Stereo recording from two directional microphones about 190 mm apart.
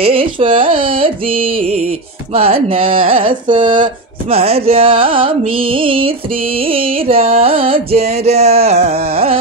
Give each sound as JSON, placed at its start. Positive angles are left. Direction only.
{"t": 0.0, "sound": "speech", "side_deg": -30}